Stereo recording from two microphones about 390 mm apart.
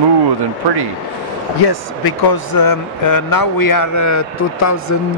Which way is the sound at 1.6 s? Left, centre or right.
Left.